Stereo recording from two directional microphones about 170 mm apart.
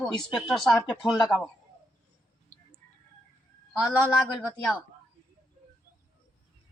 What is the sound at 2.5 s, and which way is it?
Chicken, 40° left (ahead or behind).